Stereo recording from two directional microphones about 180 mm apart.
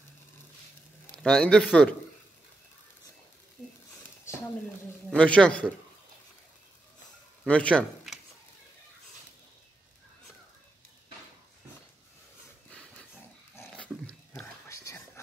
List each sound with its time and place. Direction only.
1.1 s a man's voice: 5° left (ahead or behind)
5.1 s a man's voice: 5° left (ahead or behind)
7.4 s a man's voice: 5° left (ahead or behind)
12.6 s dog: 5° left (ahead or behind)
14.0 s a sound: 5° left (ahead or behind)
14.7 s whispering: 15° left (ahead or behind)